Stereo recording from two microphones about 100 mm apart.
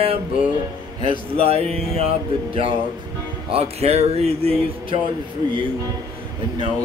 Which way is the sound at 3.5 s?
85° right.